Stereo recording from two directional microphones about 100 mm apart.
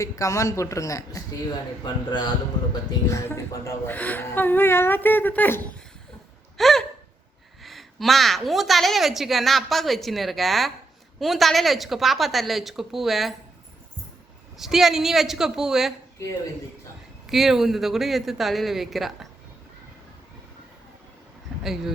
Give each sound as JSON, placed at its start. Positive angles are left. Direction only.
{"t": 0.0, "sound": "a man's voice", "side_deg": 30}
{"t": 1.8, "sound": "a man's voice", "side_deg": 45}
{"t": 3.1, "sound": "speech", "side_deg": 30}
{"t": 3.8, "sound": "speech", "side_deg": 20}
{"t": 6.6, "sound": "gasp", "side_deg": 0}
{"t": 7.6, "sound": "a woman's voice", "side_deg": 0}
{"t": 14.6, "sound": "a woman's voice", "side_deg": -5}
{"t": 17.2, "sound": "a woman's voice", "side_deg": 0}
{"t": 21.6, "sound": "a woman's voice", "side_deg": -5}